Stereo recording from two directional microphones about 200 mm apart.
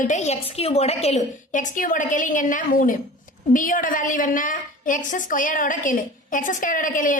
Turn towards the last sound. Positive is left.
turn(degrees=40)  # may be behind; listen again after turning